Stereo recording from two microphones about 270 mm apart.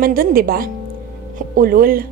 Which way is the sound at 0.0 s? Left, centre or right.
Right.